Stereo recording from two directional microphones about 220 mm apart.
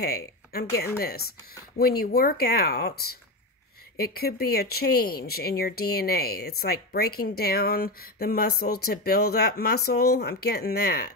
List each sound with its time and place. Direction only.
0.0 s speech: 45° left (ahead or behind)